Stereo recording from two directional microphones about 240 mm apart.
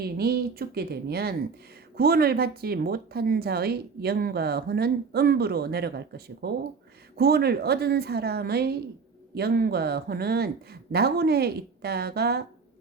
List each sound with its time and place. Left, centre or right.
0.0 s speech: right